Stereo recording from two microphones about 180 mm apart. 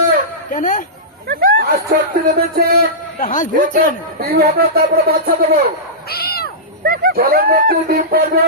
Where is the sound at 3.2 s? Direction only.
45° left (ahead or behind).